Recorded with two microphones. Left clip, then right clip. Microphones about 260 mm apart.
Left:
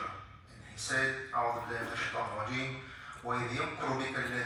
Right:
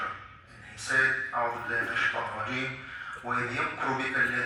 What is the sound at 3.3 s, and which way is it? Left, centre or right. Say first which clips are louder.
Speech: right 7 dB; left.